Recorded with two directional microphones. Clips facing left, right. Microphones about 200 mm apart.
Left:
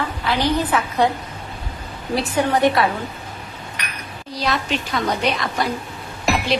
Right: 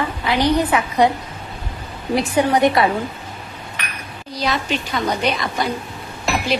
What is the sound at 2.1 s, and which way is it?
Speech, 15° right (ahead or behind).